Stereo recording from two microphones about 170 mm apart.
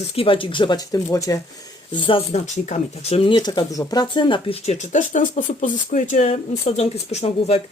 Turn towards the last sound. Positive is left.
turn(degrees=40)  # may be behind; listen again after turning